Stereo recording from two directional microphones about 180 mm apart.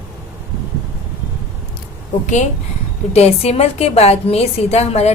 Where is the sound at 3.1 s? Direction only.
35° left (ahead or behind).